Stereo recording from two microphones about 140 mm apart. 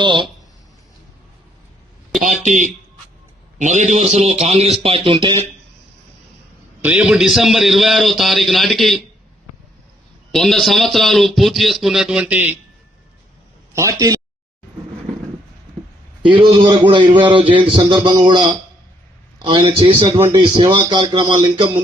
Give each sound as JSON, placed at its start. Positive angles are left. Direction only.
{"t": 0.0, "sound": "a man's voice", "side_deg": -35}
{"t": 2.2, "sound": "a man's voice", "side_deg": -60}
{"t": 6.8, "sound": "a man's voice", "side_deg": -10}
{"t": 10.3, "sound": "a man's voice", "side_deg": 0}
{"t": 16.2, "sound": "a man's voice", "side_deg": -35}
{"t": 19.4, "sound": "a man's voice", "side_deg": -35}